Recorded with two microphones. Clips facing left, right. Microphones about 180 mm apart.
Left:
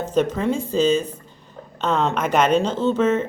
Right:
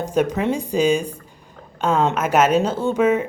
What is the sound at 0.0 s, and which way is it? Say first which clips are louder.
Speech: right 1 dB; 10° right (ahead or behind).